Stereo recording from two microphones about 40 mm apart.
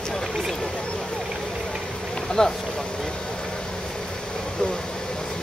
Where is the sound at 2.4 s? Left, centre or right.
Centre.